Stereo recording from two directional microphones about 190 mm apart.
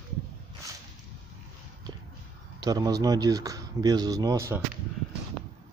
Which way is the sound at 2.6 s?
20° right (ahead or behind).